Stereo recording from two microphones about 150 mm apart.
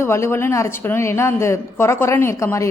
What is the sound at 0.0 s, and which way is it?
A woman's voice, 15° left (ahead or behind).